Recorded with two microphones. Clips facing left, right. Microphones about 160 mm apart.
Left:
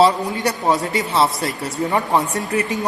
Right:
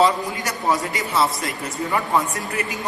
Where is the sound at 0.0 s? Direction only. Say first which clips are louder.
Left 4 dB; 30° left (ahead or behind).